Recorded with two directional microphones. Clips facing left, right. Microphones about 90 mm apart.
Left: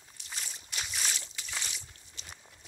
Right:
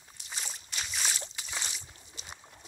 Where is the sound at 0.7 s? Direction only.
5° left (ahead or behind).